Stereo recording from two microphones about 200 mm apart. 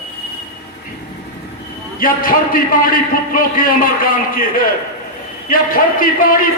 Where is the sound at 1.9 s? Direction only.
45° left (ahead or behind).